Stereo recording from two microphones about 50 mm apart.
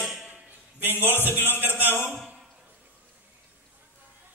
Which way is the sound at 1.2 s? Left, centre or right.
Right.